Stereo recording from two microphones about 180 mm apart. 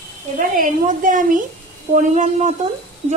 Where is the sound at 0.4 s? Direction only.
50° right (ahead or behind).